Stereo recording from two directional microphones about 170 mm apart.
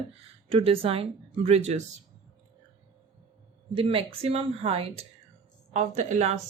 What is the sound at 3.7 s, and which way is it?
A woman's voice, 35° right (ahead or behind).